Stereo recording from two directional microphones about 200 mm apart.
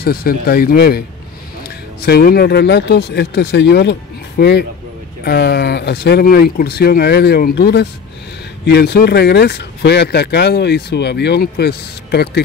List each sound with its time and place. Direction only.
0.0 s speech: 50° left (ahead or behind)